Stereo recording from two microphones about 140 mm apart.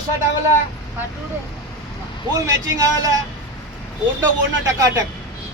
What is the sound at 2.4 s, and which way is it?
Speech, 20° right (ahead or behind).